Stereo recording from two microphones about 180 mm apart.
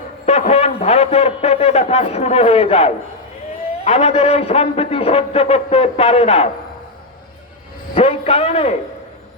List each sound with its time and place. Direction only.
0.3 s a man's voice: 35° left (ahead or behind)
7.9 s a man's voice: 30° left (ahead or behind)